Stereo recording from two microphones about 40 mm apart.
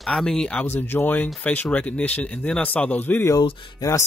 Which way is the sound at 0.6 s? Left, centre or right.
Left.